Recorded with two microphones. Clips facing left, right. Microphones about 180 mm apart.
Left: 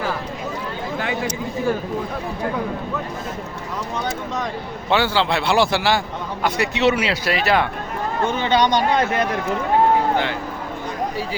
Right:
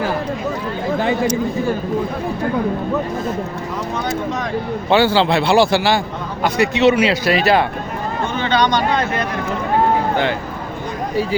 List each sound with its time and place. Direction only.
4.9 s a man's voice: 35° right (ahead or behind)
8.4 s speech: 15° left (ahead or behind)